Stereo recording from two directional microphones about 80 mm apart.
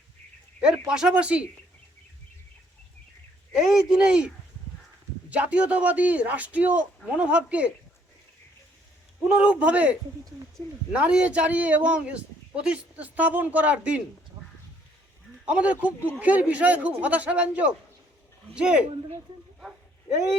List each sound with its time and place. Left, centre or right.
0.6 s a man's voice: centre
3.5 s a man's voice: centre
5.3 s a man's voice: centre
9.3 s a man's voice: centre
10.6 s speech: left
10.9 s a man's voice: centre
15.4 s a man's voice: centre